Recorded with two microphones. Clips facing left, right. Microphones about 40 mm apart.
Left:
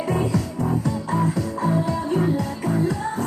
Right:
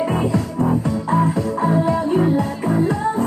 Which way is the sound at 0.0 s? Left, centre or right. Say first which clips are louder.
Right 3 dB; right.